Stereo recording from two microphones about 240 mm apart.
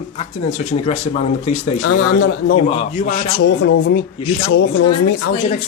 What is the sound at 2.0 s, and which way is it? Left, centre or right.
Speech, left.